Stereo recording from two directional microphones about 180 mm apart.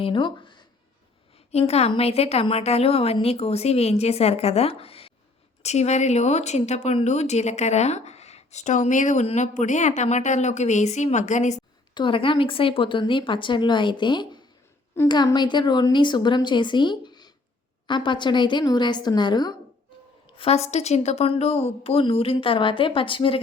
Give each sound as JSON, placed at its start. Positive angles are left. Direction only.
{"t": 0.0, "sound": "speech", "side_deg": 25}
{"t": 1.5, "sound": "speech", "side_deg": 35}
{"t": 11.9, "sound": "speech", "side_deg": 30}
{"t": 20.3, "sound": "speech", "side_deg": 35}